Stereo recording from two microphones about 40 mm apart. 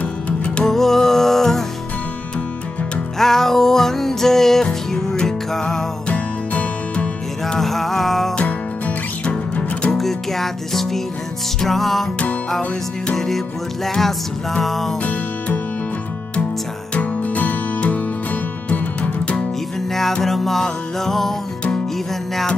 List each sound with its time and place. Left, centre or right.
0.0 s music: left
0.7 s music: centre
3.2 s music: centre
6.0 s music: left
7.4 s music: centre
9.2 s music: left
9.9 s music: centre
13.1 s music: centre
15.0 s music: left
16.9 s music: left
19.9 s music: centre